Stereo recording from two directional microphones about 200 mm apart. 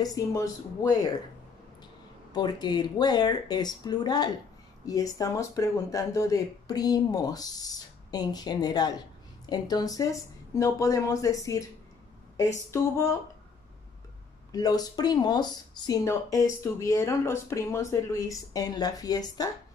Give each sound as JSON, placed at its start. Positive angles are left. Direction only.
{"t": 0.0, "sound": "speech", "side_deg": 15}
{"t": 2.3, "sound": "speech", "side_deg": 20}
{"t": 12.7, "sound": "speech", "side_deg": 15}
{"t": 14.5, "sound": "speech", "side_deg": 20}